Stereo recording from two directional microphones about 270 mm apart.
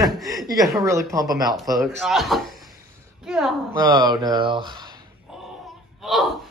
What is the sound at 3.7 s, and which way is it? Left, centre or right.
Speech, centre.